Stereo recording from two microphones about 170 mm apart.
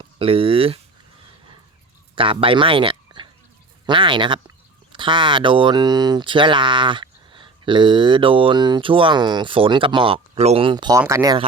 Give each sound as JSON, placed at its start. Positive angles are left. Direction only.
{"t": 0.0, "sound": "speech", "side_deg": -30}
{"t": 2.1, "sound": "speech", "side_deg": -30}